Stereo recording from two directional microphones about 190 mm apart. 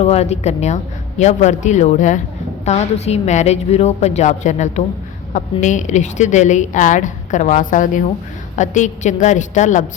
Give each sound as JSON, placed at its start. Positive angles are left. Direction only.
{"t": 0.0, "sound": "a woman's voice", "side_deg": 35}